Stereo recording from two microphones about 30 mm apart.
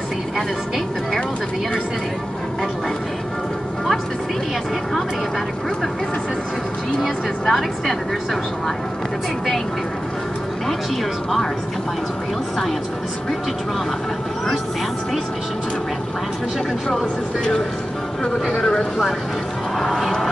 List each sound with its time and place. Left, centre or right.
7.4 s a woman's voice: centre
18.6 s speech: left